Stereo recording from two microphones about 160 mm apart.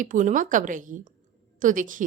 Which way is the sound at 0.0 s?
55° right (ahead or behind).